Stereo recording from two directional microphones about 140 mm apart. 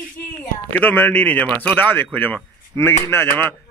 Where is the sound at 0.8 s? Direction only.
10° left (ahead or behind).